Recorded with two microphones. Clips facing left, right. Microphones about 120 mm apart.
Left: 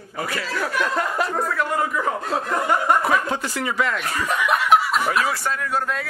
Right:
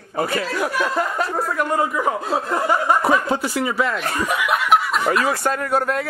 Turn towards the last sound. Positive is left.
turn(degrees=-55)  # may be behind; listen again after turning